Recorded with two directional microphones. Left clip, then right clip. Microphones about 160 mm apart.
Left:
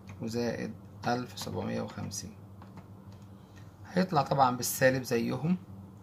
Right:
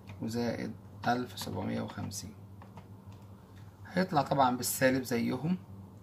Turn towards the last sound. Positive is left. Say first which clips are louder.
# left 2 dB
turn(degrees=25)  # may be behind; listen again after turning